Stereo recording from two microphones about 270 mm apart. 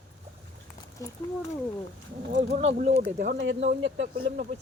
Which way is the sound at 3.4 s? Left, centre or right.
Right.